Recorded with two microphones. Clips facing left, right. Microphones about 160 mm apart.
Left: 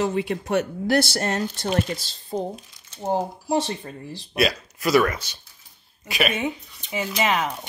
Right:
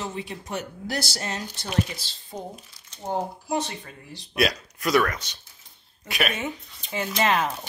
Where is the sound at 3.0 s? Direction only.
30° left (ahead or behind).